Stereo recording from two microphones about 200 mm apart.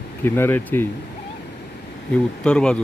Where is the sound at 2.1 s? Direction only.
5° left (ahead or behind).